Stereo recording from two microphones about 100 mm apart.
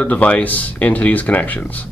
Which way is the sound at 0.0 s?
15° left (ahead or behind).